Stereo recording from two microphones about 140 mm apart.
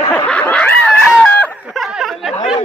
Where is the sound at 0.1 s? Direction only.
10° left (ahead or behind).